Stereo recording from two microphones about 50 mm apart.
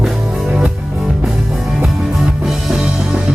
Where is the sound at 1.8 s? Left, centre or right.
Centre.